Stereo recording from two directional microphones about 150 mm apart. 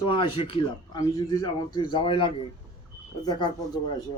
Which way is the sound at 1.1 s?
25° left (ahead or behind).